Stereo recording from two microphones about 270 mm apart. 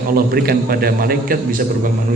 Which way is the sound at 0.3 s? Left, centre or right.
Right.